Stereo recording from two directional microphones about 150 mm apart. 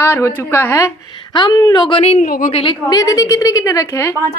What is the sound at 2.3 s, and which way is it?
Speech, 65° left (ahead or behind).